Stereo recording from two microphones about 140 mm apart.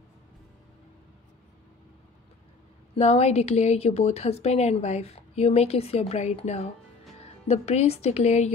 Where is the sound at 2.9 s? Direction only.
50° left (ahead or behind).